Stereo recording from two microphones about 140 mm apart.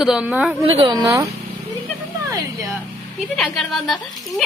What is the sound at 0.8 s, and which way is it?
Speech, 25° right (ahead or behind).